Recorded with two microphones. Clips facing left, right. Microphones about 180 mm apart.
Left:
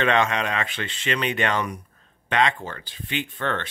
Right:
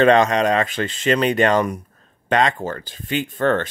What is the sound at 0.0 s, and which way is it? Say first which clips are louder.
Speech: right 8 dB; 40° right (ahead or behind).